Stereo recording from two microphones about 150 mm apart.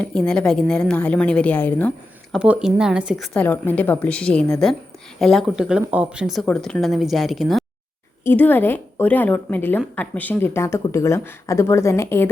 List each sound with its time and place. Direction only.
0.0 s a woman's voice: 5° left (ahead or behind)
2.3 s speech: 5° right (ahead or behind)
3.3 s a woman's voice: 10° left (ahead or behind)
8.2 s a woman's voice: 15° left (ahead or behind)